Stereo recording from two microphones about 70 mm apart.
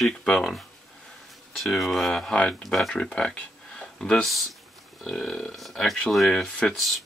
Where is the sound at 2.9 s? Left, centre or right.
Centre.